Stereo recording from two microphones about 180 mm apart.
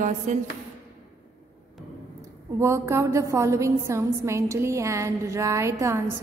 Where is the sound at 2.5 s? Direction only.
15° right (ahead or behind).